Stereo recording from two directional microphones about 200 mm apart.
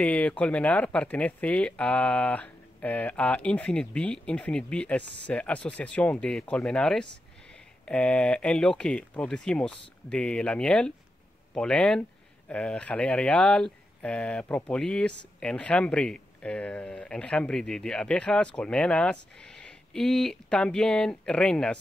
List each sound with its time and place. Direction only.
0.0 s speech: 5° left (ahead or behind)